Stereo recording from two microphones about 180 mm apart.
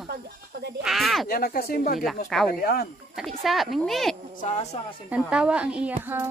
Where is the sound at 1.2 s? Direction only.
55° left (ahead or behind).